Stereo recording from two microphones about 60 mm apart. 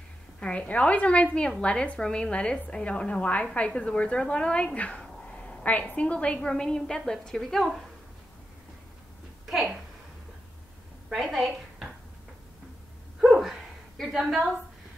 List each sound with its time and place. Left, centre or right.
0.4 s a woman's voice: left; by 7.6 s centre
11.1 s a woman's voice: centre
13.3 s a sound: centre
14.0 s a woman's voice: centre